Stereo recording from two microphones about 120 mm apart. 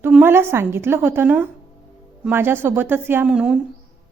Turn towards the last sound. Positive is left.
turn(degrees=-5)  # may be behind; listen again after turning